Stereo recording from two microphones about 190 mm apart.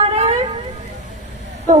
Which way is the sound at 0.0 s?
30° right (ahead or behind).